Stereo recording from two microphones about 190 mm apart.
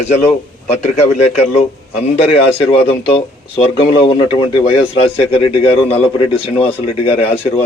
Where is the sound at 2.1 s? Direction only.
30° left (ahead or behind).